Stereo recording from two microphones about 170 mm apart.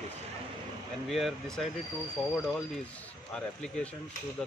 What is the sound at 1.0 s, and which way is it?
Speech, centre (ahead or behind).